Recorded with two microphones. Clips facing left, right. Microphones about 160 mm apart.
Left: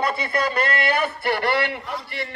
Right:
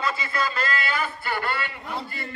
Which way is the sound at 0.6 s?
65° left (ahead or behind).